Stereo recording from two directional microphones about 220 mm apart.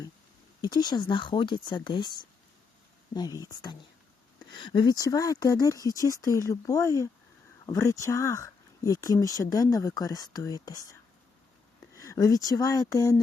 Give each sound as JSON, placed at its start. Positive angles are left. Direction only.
{"t": 0.6, "sound": "speech", "side_deg": 20}
{"t": 3.2, "sound": "speech", "side_deg": 15}
{"t": 11.9, "sound": "speech", "side_deg": 15}